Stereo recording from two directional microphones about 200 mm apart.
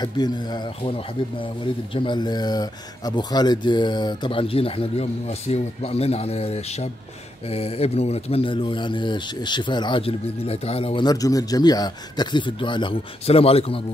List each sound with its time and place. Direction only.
0.0 s speech: 20° left (ahead or behind)